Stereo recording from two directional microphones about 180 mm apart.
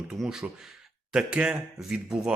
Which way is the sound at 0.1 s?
Centre (ahead or behind).